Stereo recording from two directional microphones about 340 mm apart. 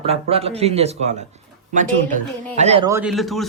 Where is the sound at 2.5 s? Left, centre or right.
Centre.